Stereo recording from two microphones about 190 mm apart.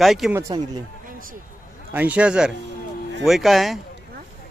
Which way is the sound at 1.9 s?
5° right (ahead or behind).